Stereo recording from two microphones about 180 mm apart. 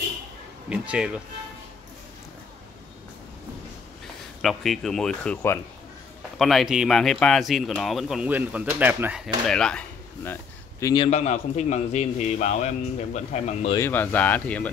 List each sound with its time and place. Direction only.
0.7 s speech: 5° right (ahead or behind)
4.4 s speech: centre (ahead or behind); by 11.1 s 20° left (ahead or behind)
11.1 s a man's voice: 40° left (ahead or behind)
13.7 s speech: 10° left (ahead or behind)